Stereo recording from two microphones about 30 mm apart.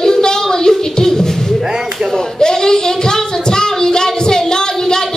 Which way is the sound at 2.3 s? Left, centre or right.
Left.